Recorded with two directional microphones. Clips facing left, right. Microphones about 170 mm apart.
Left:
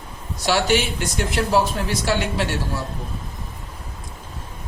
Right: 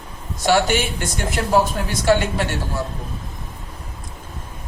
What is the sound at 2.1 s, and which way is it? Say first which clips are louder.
Speech: right 7 dB; 50° right (ahead or behind).